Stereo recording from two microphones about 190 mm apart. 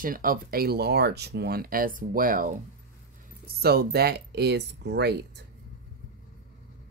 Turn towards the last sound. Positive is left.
turn(degrees=-60)  # may be behind; listen again after turning